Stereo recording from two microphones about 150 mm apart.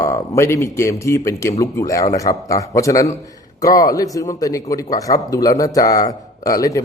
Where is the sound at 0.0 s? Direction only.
20° left (ahead or behind).